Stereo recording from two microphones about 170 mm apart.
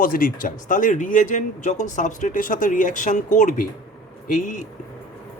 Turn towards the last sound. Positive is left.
turn(degrees=50)  # may be behind; listen again after turning